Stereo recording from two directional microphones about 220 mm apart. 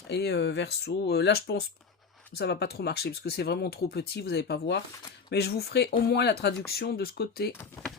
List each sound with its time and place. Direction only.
0.1 s speech: 50° left (ahead or behind)
7.6 s speech: 5° left (ahead or behind)